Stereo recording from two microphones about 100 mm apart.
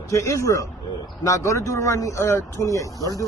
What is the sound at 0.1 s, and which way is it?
Speech, 30° left (ahead or behind).